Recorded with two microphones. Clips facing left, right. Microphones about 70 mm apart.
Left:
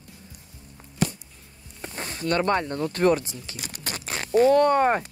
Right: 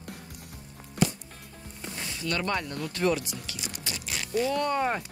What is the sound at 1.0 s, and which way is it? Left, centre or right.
Music, right.